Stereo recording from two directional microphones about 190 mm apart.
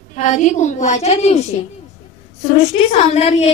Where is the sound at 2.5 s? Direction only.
35° left (ahead or behind).